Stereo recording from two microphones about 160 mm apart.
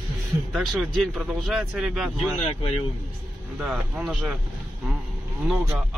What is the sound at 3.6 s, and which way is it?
Speech, centre (ahead or behind).